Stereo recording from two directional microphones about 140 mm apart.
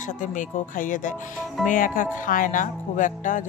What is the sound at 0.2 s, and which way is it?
Speech, 65° left (ahead or behind).